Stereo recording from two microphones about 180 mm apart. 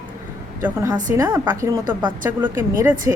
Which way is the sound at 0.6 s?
15° right (ahead or behind).